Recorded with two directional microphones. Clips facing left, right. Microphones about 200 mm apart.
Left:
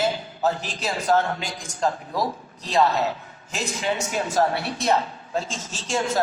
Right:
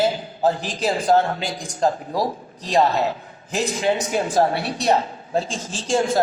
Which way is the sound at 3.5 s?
35° right (ahead or behind).